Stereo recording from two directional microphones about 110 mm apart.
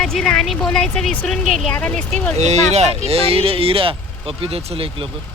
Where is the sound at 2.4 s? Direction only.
90° right; by 5.0 s 60° right (ahead or behind).